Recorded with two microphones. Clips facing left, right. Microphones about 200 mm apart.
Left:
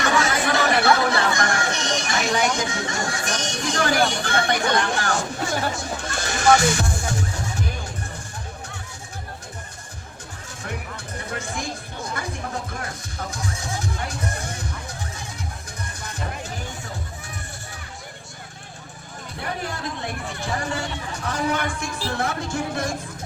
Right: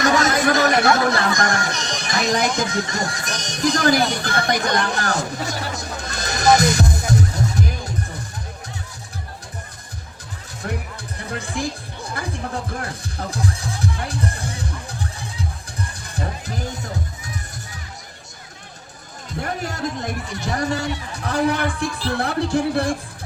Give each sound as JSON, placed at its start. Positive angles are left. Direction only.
{"t": 0.0, "sound": "speech", "side_deg": -40}
{"t": 11.3, "sound": "speech", "side_deg": -35}
{"t": 12.0, "sound": "music", "side_deg": -35}
{"t": 19.4, "sound": "a sound", "side_deg": -40}
{"t": 20.4, "sound": "speech", "side_deg": -40}